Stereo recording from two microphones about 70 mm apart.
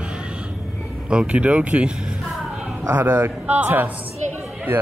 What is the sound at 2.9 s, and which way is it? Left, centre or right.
Speech, right.